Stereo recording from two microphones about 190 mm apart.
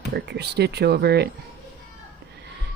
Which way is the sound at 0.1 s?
60° right (ahead or behind).